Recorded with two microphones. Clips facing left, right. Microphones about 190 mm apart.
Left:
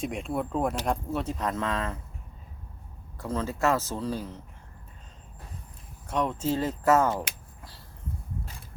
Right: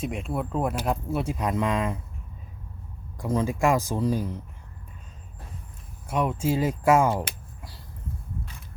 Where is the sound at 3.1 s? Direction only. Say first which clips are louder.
Right 5 dB; 15° right (ahead or behind).